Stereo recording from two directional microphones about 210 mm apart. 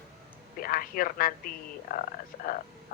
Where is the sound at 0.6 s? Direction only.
45° left (ahead or behind).